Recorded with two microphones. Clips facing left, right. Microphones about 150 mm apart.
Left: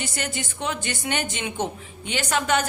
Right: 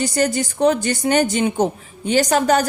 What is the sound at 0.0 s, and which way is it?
A woman's voice, 40° right (ahead or behind).